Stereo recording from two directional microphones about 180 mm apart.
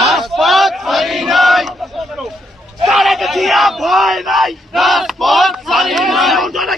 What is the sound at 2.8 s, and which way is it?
Speech, centre (ahead or behind).